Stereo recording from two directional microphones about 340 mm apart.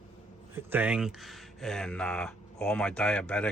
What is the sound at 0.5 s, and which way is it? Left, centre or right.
Speech, centre.